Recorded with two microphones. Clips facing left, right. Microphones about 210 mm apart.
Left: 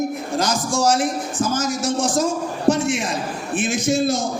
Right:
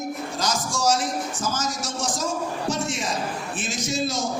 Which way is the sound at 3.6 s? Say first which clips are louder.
Left 9 dB; 55° left (ahead or behind).